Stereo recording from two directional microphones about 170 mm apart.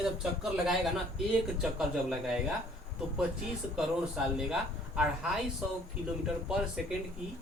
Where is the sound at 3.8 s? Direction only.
5° right (ahead or behind).